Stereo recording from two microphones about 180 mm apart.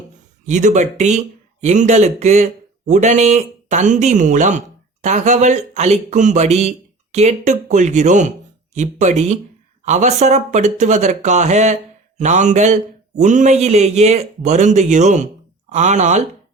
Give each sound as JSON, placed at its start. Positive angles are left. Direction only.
{"t": 0.4, "sound": "speech", "side_deg": -40}